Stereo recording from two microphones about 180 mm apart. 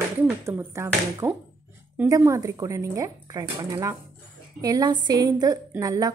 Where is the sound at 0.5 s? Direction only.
15° right (ahead or behind).